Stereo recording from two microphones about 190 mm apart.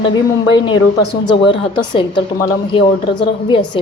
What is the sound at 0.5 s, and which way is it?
Speech, 20° left (ahead or behind).